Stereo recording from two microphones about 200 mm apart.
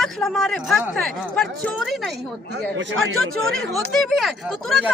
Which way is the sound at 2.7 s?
75° right (ahead or behind).